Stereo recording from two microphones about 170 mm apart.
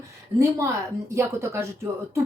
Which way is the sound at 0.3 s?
20° right (ahead or behind).